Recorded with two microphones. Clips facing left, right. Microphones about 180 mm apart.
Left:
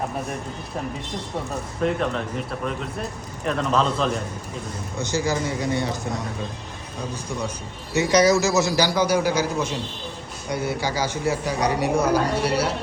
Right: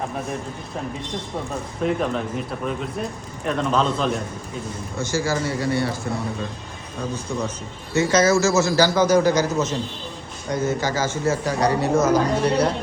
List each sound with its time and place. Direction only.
1.8 s a man's voice: centre (ahead or behind)
4.9 s a man's voice: 20° left (ahead or behind)
7.9 s a man's voice: 15° left (ahead or behind)